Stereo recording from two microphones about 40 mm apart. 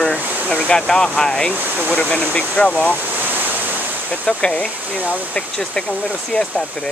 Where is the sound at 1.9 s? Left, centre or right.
Left.